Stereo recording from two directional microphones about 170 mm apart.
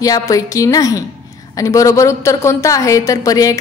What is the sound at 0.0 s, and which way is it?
A woman's voice, 20° left (ahead or behind).